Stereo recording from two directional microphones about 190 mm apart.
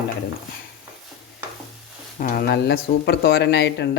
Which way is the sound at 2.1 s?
50° left (ahead or behind).